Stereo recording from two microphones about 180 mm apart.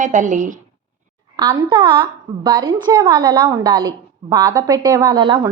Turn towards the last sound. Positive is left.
turn(degrees=-25)  # may be behind; listen again after turning